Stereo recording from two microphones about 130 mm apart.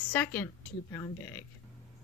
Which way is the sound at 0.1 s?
10° left (ahead or behind).